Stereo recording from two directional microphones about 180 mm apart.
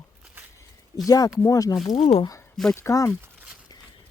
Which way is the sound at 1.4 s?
20° left (ahead or behind).